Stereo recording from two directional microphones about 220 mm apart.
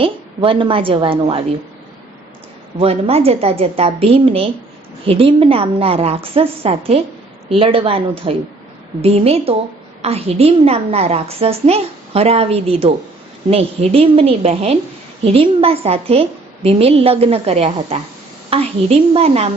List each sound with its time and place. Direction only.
0.0 s a woman's voice: 25° right (ahead or behind)
2.7 s a woman's voice: 25° right (ahead or behind)